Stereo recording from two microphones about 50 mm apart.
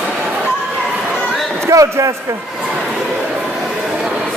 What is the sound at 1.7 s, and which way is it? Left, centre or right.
Speech, right.